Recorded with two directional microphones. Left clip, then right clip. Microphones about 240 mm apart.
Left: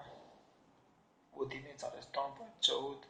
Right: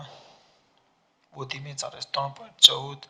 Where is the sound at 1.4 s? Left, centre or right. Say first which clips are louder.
Right 7 dB; right.